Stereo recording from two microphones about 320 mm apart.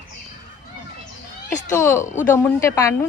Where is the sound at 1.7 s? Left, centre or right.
Centre.